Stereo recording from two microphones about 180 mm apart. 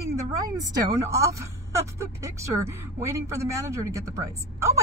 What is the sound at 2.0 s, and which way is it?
Speech, 15° right (ahead or behind).